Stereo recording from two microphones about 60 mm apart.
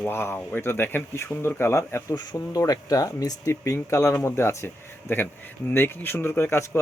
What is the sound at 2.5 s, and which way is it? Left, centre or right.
Speech, left.